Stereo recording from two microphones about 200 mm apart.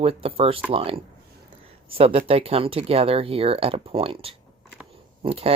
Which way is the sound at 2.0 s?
30° right (ahead or behind).